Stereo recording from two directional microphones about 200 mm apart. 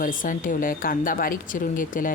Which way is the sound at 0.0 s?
40° left (ahead or behind).